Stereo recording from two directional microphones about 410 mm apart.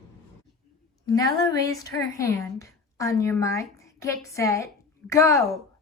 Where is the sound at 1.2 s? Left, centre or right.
Centre.